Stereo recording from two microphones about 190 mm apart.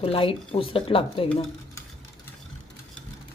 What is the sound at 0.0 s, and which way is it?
Speech, 30° left (ahead or behind).